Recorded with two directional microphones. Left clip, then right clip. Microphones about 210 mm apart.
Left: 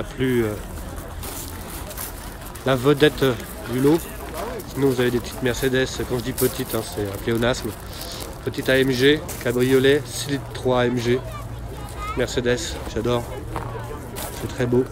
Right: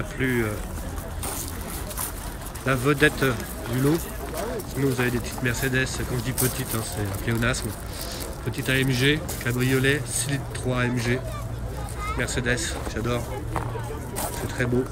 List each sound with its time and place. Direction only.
0.2 s speech: 15° left (ahead or behind)
2.6 s speech: 5° left (ahead or behind)
4.7 s speech: 5° left (ahead or behind)
14.6 s speech: 10° left (ahead or behind)